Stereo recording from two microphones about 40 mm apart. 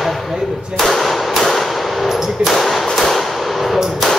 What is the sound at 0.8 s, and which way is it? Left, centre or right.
Clang, centre.